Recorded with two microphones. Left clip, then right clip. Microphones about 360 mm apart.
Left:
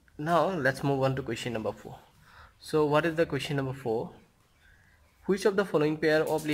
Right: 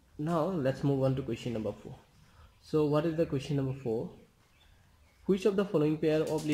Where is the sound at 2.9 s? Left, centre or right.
Left.